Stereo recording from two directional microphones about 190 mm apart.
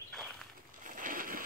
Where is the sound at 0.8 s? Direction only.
45° right (ahead or behind).